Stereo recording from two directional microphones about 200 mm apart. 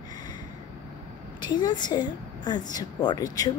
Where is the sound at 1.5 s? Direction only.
20° left (ahead or behind).